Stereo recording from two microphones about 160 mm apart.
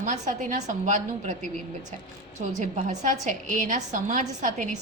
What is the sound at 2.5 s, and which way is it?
A woman's voice, 45° right (ahead or behind).